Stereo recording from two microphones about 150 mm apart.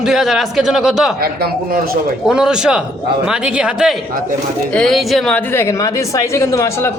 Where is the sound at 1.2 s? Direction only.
85° right.